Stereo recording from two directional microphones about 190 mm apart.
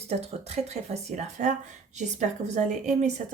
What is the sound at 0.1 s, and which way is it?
A woman's voice, 35° right (ahead or behind).